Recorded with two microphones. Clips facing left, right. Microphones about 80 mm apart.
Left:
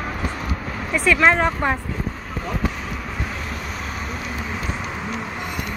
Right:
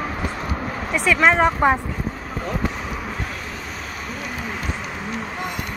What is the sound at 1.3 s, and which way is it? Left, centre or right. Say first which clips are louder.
Speech: right 4 dB; centre.